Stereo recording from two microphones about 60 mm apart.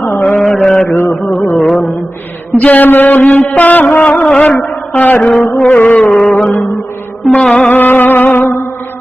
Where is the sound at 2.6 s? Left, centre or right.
Left.